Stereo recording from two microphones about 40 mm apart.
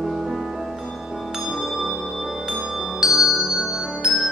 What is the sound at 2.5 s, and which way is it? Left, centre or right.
Music, centre.